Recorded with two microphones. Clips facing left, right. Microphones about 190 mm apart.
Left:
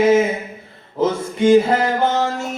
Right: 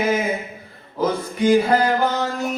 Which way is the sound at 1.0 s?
25° left (ahead or behind).